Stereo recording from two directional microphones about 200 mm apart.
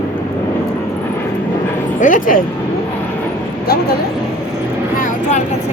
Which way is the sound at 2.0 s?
40° left (ahead or behind).